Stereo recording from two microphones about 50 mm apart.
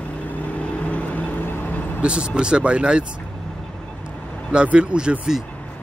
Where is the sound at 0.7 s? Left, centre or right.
Left.